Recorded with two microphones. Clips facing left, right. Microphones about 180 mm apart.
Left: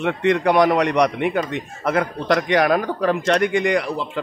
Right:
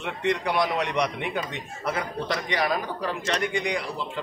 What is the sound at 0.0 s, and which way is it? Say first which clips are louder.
A man's voice: left 8 dB; 60° left (ahead or behind).